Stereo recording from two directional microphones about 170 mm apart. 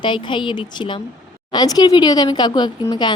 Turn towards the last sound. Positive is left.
turn(degrees=25)  # may be behind; listen again after turning